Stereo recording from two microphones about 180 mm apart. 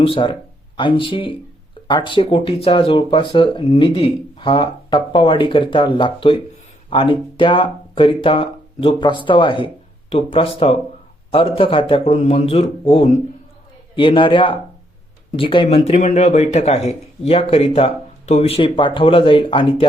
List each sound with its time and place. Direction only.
0.0 s speech: 30° left (ahead or behind)